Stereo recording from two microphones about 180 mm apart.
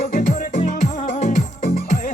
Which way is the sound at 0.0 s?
45° left (ahead or behind).